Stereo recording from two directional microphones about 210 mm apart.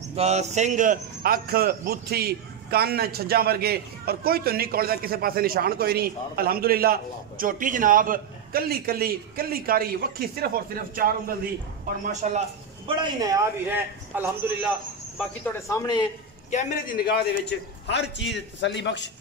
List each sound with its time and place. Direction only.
0.1 s a man's voice: 30° right (ahead or behind)
12.1 s a man's voice: 35° right (ahead or behind); by 14.7 s 10° right (ahead or behind)
15.7 s a man's voice: 20° left (ahead or behind)
16.4 s a man's voice: 40° left (ahead or behind); by 19.0 s 55° left (ahead or behind)